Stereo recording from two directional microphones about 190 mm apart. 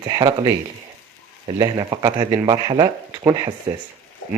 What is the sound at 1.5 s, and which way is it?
Speech, 20° right (ahead or behind).